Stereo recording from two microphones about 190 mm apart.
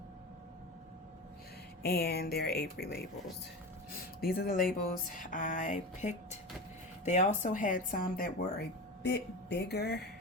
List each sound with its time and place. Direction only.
1.8 s speech: 55° left (ahead or behind)
4.2 s speech: 50° left (ahead or behind)
9.0 s speech: 65° left (ahead or behind)